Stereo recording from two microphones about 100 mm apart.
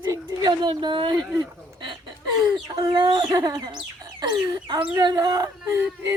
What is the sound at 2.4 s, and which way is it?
Speech, 45° right (ahead or behind).